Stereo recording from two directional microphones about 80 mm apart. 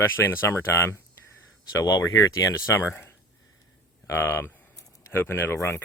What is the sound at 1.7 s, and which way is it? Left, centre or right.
Speech, left.